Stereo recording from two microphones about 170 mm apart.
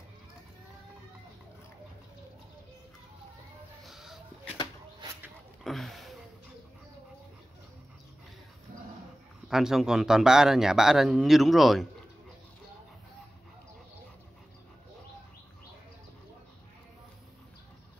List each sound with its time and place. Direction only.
3.8 s music: centre (ahead or behind)
5.6 s speech: centre (ahead or behind)
9.5 s speech: 5° right (ahead or behind)